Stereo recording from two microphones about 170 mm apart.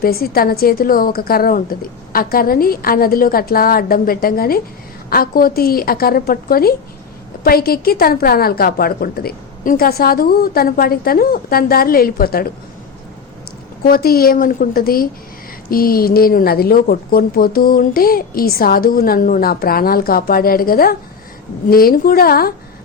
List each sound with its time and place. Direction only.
0.0 s a woman's voice: 60° left (ahead or behind)
13.8 s a woman's voice: 60° left (ahead or behind)